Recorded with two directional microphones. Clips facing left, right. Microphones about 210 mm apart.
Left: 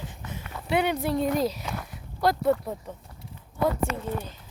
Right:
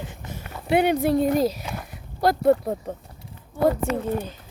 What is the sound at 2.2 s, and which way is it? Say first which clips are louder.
Speech: right 4 dB; 45° right (ahead or behind).